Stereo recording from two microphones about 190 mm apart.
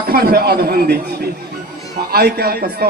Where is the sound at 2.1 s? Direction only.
60° right (ahead or behind).